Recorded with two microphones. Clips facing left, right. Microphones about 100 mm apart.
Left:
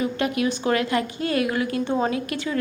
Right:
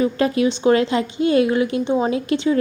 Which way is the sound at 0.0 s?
30° right (ahead or behind).